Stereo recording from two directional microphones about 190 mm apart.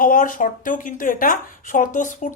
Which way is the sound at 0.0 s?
45° left (ahead or behind).